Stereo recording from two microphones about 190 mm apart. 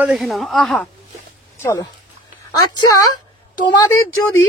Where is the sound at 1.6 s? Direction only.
15° left (ahead or behind).